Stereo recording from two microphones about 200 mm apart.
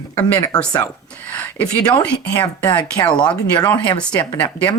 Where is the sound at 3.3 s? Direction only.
15° left (ahead or behind).